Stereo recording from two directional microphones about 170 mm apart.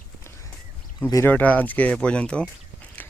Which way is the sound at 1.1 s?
15° left (ahead or behind).